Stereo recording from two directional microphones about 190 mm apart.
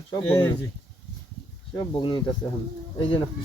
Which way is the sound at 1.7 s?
25° left (ahead or behind).